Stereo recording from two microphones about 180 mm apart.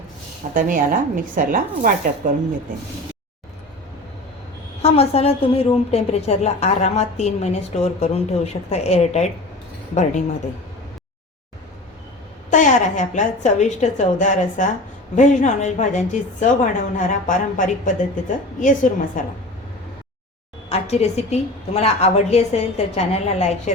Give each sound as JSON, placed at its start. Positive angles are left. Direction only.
{"t": 0.5, "sound": "speech", "side_deg": -50}
{"t": 4.8, "sound": "a woman's voice", "side_deg": 35}
{"t": 12.5, "sound": "a woman's voice", "side_deg": 45}
{"t": 20.7, "sound": "a woman's voice", "side_deg": 35}